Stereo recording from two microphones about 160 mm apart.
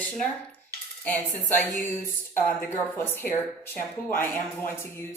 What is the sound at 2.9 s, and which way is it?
A woman's voice, 15° left (ahead or behind).